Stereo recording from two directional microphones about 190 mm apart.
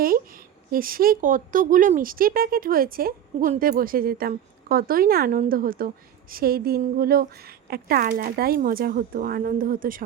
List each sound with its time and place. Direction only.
0.7 s a woman's voice: 50° right (ahead or behind)